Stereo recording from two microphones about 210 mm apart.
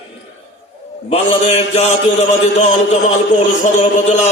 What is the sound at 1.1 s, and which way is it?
Mantra, 30° left (ahead or behind).